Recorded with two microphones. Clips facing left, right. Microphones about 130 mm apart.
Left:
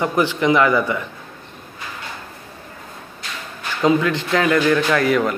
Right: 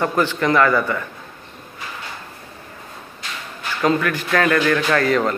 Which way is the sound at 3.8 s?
20° left (ahead or behind).